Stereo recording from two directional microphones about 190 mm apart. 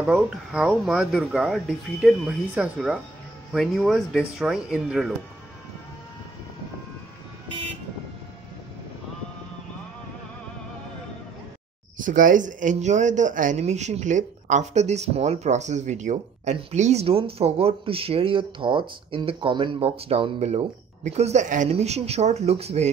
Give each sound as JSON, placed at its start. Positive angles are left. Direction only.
{"t": 0.0, "sound": "speech", "side_deg": -5}
{"t": 12.0, "sound": "a man's voice", "side_deg": -45}